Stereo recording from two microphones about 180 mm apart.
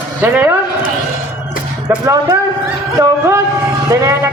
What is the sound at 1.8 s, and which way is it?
A man's voice, 20° right (ahead or behind).